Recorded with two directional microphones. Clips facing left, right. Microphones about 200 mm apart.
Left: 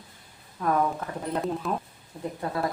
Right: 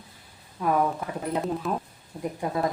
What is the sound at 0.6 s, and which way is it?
Speech, 10° right (ahead or behind).